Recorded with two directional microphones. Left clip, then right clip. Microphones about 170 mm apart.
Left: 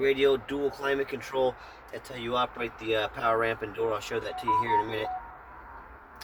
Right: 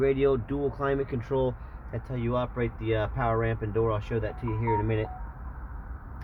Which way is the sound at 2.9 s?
5° right (ahead or behind).